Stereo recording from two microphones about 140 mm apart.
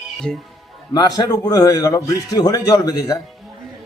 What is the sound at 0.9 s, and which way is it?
A man's voice, 30° left (ahead or behind).